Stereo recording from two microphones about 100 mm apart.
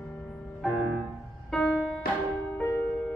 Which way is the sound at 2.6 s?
20° left (ahead or behind).